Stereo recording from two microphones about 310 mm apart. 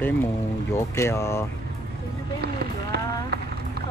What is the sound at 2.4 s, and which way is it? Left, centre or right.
Run, right.